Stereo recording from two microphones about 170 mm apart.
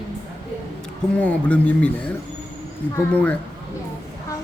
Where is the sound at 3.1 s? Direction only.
10° left (ahead or behind).